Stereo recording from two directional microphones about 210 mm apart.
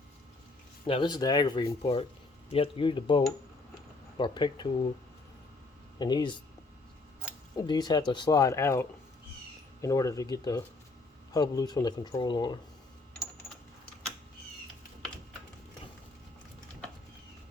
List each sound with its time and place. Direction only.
0.9 s speech: 20° left (ahead or behind)
6.0 s speech: 20° left (ahead or behind)
7.5 s speech: 20° left (ahead or behind)